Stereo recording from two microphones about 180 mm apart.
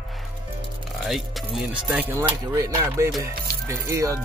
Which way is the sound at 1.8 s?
10° right (ahead or behind).